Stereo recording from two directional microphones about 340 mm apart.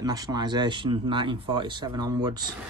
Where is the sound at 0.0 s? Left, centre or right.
Centre.